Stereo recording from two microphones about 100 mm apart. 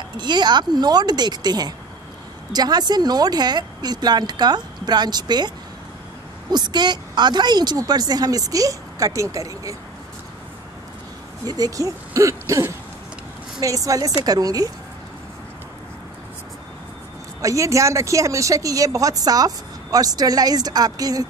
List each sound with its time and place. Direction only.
0.2 s speech: 45° right (ahead or behind)
6.5 s speech: 45° right (ahead or behind)
11.4 s speech: 40° right (ahead or behind)
17.4 s speech: 30° right (ahead or behind)